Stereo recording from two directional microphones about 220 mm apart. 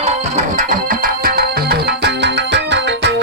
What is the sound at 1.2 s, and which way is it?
Music, 45° right (ahead or behind).